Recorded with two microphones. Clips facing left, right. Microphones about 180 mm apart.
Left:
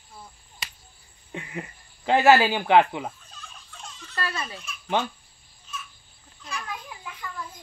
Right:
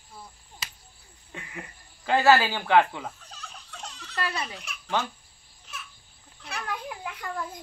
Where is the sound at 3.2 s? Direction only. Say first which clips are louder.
Right 2 dB; 75° right (ahead or behind).